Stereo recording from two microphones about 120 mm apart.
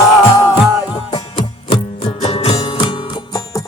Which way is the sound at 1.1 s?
45° left (ahead or behind).